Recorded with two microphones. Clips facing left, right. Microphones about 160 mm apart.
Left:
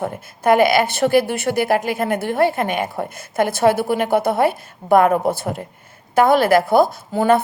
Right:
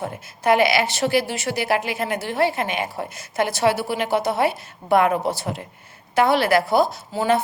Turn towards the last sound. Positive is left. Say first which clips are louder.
# left 4 dB
turn(degrees=50)  # may be behind; listen again after turning